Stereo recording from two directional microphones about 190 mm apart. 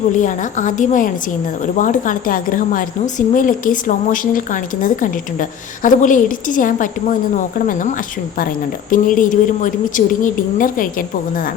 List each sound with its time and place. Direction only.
0.1 s a woman's voice: 40° left (ahead or behind)